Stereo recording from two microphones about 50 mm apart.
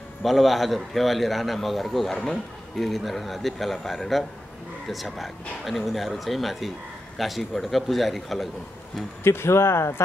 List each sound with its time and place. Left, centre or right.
0.2 s a man's voice: centre
9.2 s speech: left